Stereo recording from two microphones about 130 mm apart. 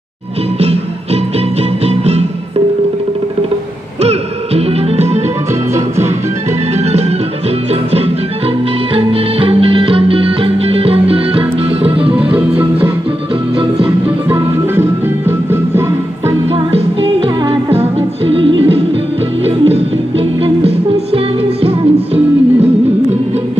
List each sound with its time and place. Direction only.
4.0 s music: 50° right (ahead or behind)
8.9 s music: 45° right (ahead or behind)
12.4 s music: 10° right (ahead or behind)
13.6 s music: 45° right (ahead or behind)
14.0 s music: 20° right (ahead or behind)
16.5 s music: 45° right (ahead or behind)
21.6 s music: 50° right (ahead or behind)